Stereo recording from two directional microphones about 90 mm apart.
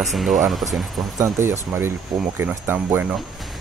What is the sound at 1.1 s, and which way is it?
Speech, 35° right (ahead or behind).